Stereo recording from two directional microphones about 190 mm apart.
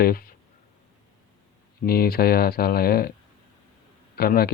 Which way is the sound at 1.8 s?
55° left (ahead or behind).